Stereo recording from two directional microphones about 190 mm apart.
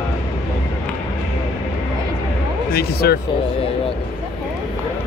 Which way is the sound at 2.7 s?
55° left (ahead or behind).